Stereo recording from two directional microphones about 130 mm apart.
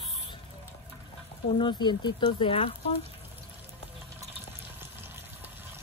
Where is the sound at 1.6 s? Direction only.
35° left (ahead or behind).